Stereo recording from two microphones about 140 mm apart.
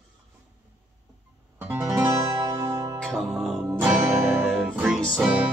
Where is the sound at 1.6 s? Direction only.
15° right (ahead or behind).